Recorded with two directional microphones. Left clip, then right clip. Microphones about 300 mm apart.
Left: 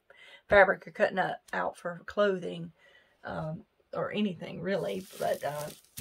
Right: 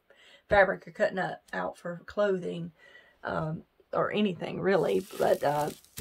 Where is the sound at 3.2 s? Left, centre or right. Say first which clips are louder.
Right 5 dB; centre.